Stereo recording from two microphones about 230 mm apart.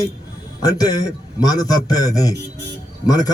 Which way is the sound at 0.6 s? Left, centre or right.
Centre.